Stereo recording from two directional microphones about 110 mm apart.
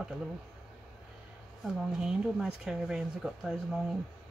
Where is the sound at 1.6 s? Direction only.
5° right (ahead or behind).